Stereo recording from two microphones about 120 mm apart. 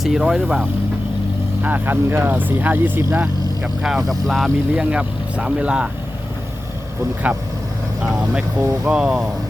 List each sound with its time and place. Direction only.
0.0 s speech: 5° right (ahead or behind)
1.6 s speech: 15° right (ahead or behind)
3.2 s speech: 5° right (ahead or behind)
4.7 s speech: 10° right (ahead or behind)
7.2 s speech: 10° right (ahead or behind)